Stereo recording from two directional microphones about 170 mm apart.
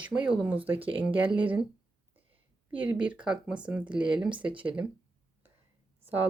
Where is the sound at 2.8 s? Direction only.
10° right (ahead or behind).